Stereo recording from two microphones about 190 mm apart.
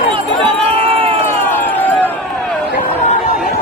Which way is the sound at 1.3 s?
10° left (ahead or behind).